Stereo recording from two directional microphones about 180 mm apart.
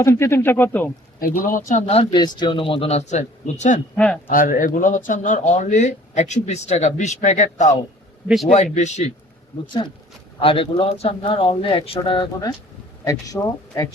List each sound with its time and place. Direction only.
0.0 s speech: 15° left (ahead or behind)
1.5 s speech: 45° left (ahead or behind)
3.9 s speech: 5° left (ahead or behind)
4.3 s speech: 50° left (ahead or behind)
8.3 s a man's voice: centre (ahead or behind)
8.5 s speech: 40° left (ahead or behind)
10.4 s speech: 30° left (ahead or behind)